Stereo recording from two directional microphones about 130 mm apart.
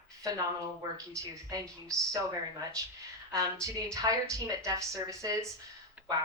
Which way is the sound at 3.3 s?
25° right (ahead or behind).